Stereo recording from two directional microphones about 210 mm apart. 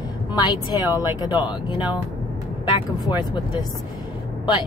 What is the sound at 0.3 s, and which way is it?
A woman's voice, 20° left (ahead or behind).